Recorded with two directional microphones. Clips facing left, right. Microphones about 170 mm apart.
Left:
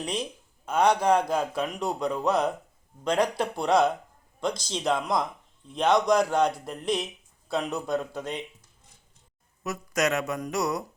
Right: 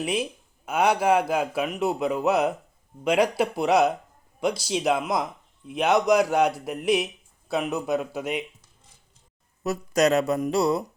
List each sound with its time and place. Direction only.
0.0 s speech: 5° right (ahead or behind)
9.6 s speech: 35° right (ahead or behind)
10.4 s music: 30° right (ahead or behind)